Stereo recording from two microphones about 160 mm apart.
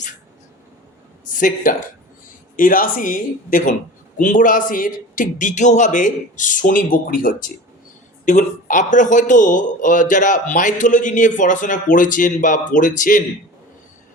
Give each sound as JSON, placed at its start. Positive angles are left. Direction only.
{"t": 1.3, "sound": "speech", "side_deg": 55}